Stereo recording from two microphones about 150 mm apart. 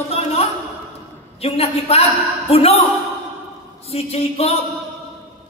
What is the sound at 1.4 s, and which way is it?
A man's voice, 40° left (ahead or behind).